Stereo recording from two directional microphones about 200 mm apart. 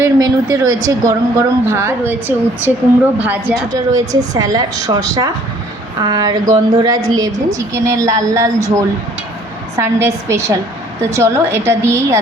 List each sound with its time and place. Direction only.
0.0 s a woman's voice: 15° right (ahead or behind)